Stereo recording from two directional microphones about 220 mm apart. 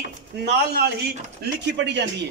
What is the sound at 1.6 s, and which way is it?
Speech, 50° right (ahead or behind).